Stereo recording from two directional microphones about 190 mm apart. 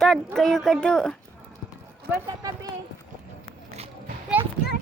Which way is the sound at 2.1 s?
20° right (ahead or behind).